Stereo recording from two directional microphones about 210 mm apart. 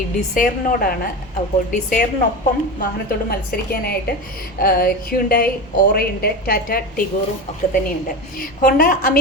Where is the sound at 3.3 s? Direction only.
45° left (ahead or behind).